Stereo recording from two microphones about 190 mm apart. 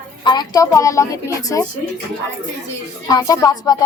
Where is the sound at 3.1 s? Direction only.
20° left (ahead or behind).